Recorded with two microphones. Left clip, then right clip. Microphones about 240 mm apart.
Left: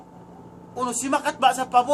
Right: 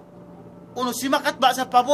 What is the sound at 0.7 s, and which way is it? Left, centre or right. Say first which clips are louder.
A man's voice: right 2 dB; right.